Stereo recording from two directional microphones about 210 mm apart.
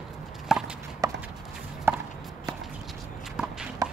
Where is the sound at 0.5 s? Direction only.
Centre (ahead or behind).